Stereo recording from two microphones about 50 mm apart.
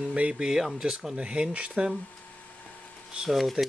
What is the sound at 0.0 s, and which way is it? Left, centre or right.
Speech, centre.